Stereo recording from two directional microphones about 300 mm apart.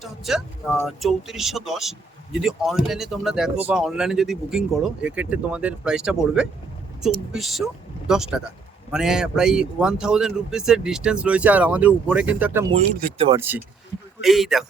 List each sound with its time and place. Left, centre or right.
0.0 s speech: centre
12.7 s speech: centre